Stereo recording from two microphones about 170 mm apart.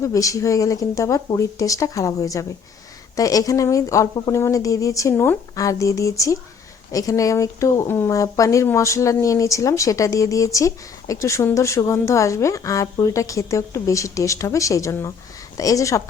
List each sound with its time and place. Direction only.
0.0 s a woman's voice: 20° left (ahead or behind)